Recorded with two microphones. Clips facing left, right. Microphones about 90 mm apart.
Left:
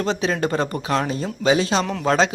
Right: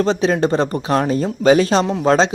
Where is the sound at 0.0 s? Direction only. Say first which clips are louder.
Right 6 dB; 35° right (ahead or behind).